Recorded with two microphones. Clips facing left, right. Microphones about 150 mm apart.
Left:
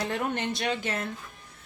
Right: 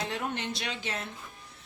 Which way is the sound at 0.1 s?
55° left (ahead or behind).